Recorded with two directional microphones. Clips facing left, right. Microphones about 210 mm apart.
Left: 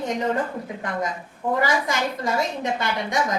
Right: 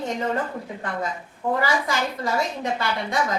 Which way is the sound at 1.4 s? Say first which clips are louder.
Even; 20° left (ahead or behind).